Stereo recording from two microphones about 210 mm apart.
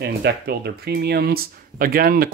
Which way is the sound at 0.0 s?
50° right (ahead or behind).